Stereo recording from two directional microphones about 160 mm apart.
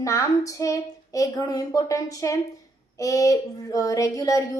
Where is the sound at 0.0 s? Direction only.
20° left (ahead or behind).